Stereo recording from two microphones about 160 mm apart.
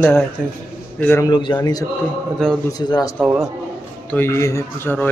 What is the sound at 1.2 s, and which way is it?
Speech, 30° left (ahead or behind).